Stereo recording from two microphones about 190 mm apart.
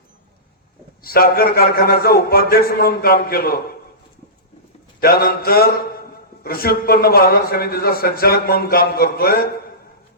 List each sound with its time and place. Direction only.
1.0 s a man's voice: 50° left (ahead or behind)
4.9 s a man's voice: 55° left (ahead or behind)